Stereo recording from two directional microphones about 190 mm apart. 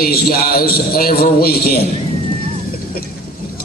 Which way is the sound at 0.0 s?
50° left (ahead or behind).